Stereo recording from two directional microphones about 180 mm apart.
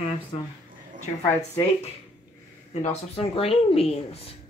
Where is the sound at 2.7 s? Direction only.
35° left (ahead or behind).